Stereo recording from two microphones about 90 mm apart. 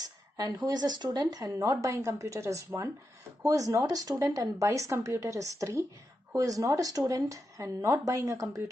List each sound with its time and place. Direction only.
0.7 s speech: 50° right (ahead or behind); by 8.6 s 35° right (ahead or behind)